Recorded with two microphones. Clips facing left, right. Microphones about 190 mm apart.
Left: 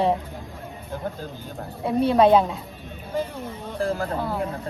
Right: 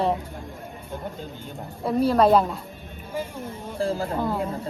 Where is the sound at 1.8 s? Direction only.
Centre (ahead or behind).